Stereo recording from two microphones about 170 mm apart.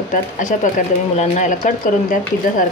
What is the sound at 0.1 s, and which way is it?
Speech, 45° left (ahead or behind).